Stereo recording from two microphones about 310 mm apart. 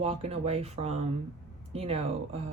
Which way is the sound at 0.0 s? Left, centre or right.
Centre.